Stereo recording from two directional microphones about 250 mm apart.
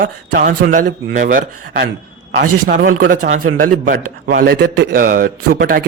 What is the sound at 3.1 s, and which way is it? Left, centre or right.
Speech, right.